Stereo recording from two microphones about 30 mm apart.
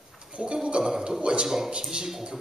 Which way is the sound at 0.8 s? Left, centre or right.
Right.